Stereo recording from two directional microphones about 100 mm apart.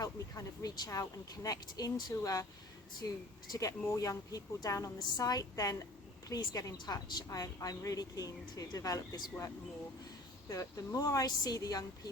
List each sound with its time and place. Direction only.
0.0 s a woman's voice: 35° left (ahead or behind)
10.5 s a woman's voice: 35° left (ahead or behind)